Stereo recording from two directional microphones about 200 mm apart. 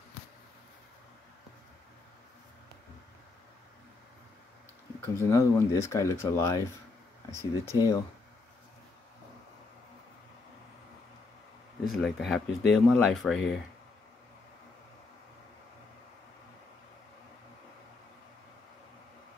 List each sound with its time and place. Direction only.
5.0 s speech: 15° left (ahead or behind)
11.9 s speech: centre (ahead or behind)